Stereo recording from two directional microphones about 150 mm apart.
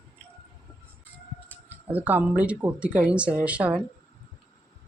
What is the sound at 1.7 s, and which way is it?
Speech, 10° right (ahead or behind).